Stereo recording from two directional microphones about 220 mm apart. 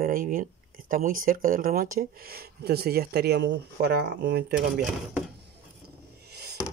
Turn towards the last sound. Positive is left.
turn(degrees=-45)  # may be behind; listen again after turning